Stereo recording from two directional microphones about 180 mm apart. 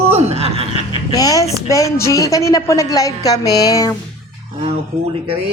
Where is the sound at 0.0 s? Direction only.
35° right (ahead or behind).